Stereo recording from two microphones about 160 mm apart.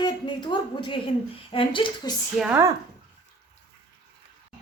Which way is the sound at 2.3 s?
5° right (ahead or behind).